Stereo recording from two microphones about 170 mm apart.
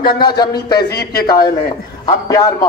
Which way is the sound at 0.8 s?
70° left (ahead or behind).